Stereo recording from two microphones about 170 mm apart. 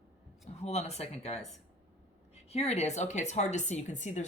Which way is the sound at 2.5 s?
40° left (ahead or behind).